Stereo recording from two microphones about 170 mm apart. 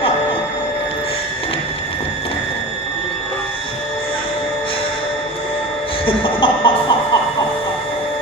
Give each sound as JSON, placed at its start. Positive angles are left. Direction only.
{"t": 6.1, "sound": "music", "side_deg": 30}